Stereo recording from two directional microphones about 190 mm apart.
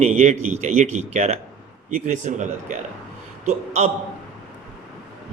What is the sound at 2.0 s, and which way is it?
Speech, 40° right (ahead or behind).